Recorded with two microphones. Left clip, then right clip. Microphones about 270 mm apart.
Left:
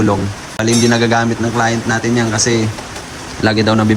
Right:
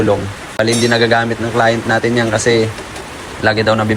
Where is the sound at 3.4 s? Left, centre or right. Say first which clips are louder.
Right 1 dB; left.